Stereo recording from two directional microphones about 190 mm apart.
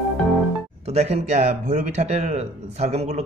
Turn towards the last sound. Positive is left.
turn(degrees=-35)  # may be behind; listen again after turning